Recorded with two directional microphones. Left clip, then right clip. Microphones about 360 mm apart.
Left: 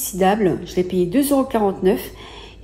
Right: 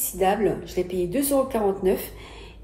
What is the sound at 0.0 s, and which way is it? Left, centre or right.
Speech, left.